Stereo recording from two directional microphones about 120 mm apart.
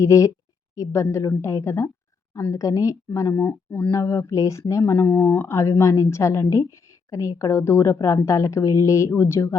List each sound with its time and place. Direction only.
0.0 s a woman's voice: 25° left (ahead or behind)
1.4 s a woman's voice: 25° left (ahead or behind)
3.9 s a woman's voice: 25° left (ahead or behind)